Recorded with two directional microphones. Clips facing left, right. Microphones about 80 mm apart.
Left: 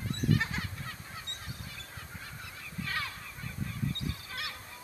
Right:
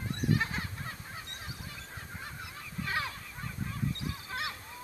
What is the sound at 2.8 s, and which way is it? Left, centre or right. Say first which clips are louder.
Goose: right 3 dB; right.